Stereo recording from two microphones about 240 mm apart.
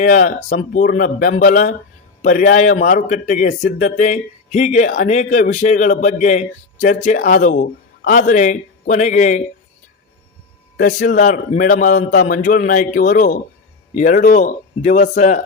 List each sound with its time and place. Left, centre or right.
0.0 s speech: left
10.8 s speech: left